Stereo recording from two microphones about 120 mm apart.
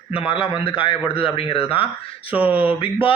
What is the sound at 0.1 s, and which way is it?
A man's voice, 50° left (ahead or behind).